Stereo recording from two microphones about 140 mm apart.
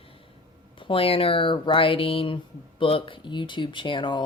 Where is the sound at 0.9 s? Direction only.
40° left (ahead or behind).